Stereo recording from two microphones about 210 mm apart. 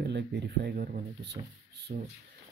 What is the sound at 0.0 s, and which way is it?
Speech, 55° right (ahead or behind).